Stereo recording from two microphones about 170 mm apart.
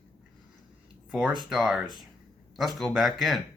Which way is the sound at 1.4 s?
Centre (ahead or behind).